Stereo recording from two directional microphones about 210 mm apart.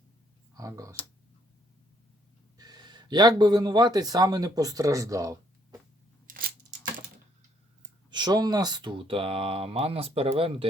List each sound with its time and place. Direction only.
0.5 s speech: 15° right (ahead or behind)
2.6 s speech: 20° right (ahead or behind)
6.2 s scissors: 40° right (ahead or behind)
8.1 s speech: 20° right (ahead or behind)